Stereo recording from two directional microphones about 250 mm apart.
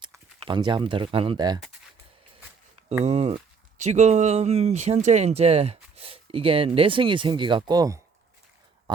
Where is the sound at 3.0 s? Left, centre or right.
Right.